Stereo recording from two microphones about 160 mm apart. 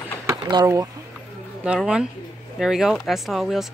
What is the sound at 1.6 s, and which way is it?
Speech, 5° right (ahead or behind).